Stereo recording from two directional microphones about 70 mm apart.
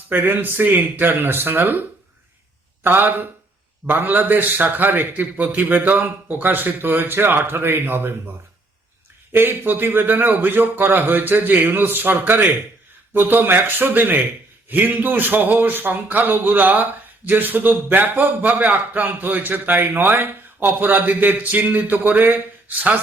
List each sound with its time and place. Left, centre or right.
0.1 s a man's voice: right
2.8 s a man's voice: right
9.3 s a man's voice: right